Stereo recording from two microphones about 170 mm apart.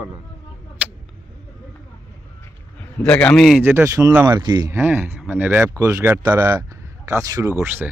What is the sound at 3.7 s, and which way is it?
Speech, 20° right (ahead or behind).